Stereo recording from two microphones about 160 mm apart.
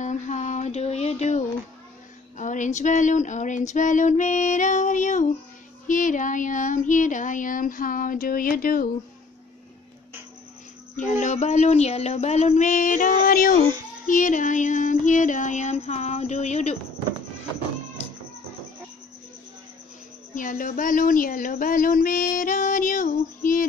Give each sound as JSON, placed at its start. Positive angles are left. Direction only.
{"t": 0.0, "sound": "a sound", "side_deg": 50}
{"t": 2.3, "sound": "female singing", "side_deg": 50}
{"t": 11.0, "sound": "female singing", "side_deg": 50}
{"t": 20.3, "sound": "speech", "side_deg": 55}